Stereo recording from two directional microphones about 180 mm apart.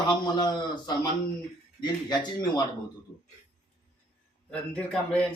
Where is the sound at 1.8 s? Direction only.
25° left (ahead or behind).